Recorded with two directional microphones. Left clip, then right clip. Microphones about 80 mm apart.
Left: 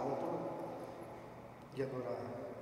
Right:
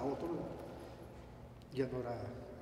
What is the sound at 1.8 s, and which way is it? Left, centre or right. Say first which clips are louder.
Speech: right 2 dB; right.